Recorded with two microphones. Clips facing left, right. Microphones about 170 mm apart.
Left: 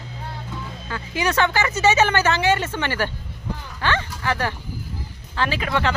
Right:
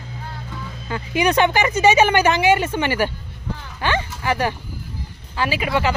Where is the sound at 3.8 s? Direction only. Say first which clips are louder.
Right 2 dB; 15° right (ahead or behind).